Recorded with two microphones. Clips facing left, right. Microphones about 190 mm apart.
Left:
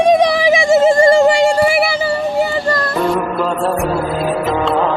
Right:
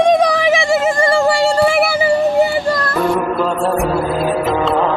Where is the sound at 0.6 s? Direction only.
25° left (ahead or behind).